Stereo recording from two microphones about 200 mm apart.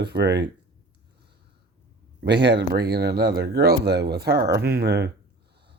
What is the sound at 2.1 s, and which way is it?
Speech, 60° right (ahead or behind).